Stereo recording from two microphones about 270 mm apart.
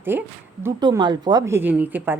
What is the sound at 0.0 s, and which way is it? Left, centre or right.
A woman's voice, centre.